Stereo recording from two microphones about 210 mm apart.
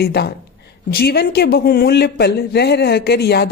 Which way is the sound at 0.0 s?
50° left (ahead or behind).